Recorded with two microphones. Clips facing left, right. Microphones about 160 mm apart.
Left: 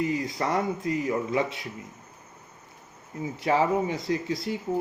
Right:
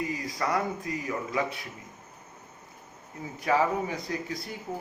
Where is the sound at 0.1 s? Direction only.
30° left (ahead or behind).